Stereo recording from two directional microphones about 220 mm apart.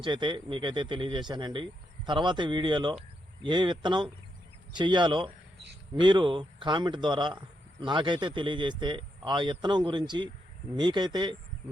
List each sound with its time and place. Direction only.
0.0 s speech: 20° right (ahead or behind)